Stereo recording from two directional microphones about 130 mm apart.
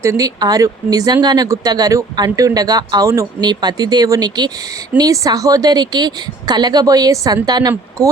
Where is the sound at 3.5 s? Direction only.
35° right (ahead or behind).